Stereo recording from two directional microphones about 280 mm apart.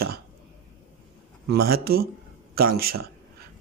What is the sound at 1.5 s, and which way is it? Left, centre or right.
Speech, right.